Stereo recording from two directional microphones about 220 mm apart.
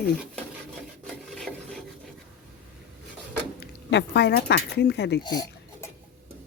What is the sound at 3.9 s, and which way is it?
Speech, 50° left (ahead or behind).